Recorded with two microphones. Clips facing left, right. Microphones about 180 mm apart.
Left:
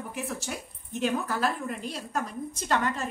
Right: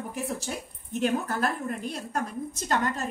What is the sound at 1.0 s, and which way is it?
A woman's voice, 50° right (ahead or behind).